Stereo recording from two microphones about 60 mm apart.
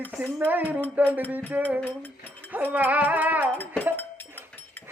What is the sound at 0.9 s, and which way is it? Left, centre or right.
Music, right.